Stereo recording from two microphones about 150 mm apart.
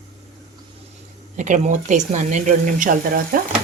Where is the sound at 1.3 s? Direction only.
55° right (ahead or behind).